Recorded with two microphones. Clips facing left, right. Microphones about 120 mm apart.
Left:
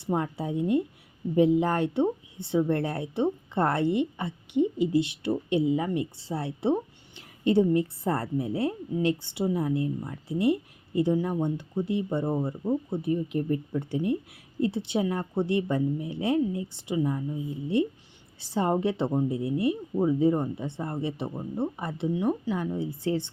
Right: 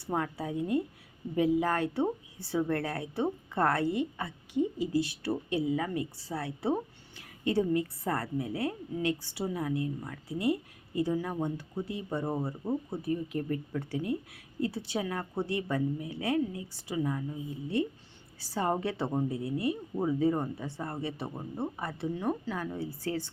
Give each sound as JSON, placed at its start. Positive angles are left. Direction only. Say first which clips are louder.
{"t": 0.0, "sound": "a woman's voice", "louder": "left 4 dB", "side_deg": 25}
{"t": 12.2, "sound": "speech", "louder": "left 5 dB", "side_deg": 0}
{"t": 13.0, "sound": "a woman's voice", "louder": "left 5 dB", "side_deg": 20}
{"t": 21.2, "sound": "speech", "louder": "left 5 dB", "side_deg": 0}
{"t": 21.8, "sound": "a woman's voice", "louder": "left 5 dB", "side_deg": 20}